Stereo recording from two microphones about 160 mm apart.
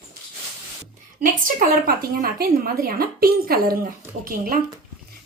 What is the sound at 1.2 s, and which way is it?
A woman's voice, 55° right (ahead or behind).